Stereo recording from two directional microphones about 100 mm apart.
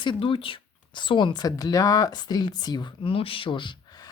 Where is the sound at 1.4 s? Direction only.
40° left (ahead or behind).